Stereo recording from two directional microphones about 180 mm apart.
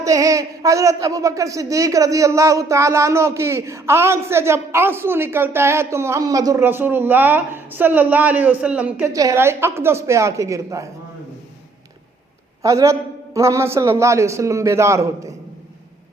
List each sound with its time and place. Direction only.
0.0 s speech: 20° right (ahead or behind)
12.6 s speech: 15° right (ahead or behind)